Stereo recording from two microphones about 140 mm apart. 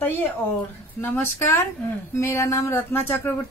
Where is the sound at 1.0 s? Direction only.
15° left (ahead or behind).